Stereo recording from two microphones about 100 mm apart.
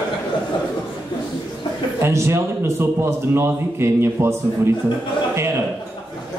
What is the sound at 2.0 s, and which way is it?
Speech, 25° right (ahead or behind).